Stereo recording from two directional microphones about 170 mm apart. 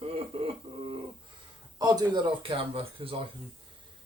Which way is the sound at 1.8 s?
25° right (ahead or behind).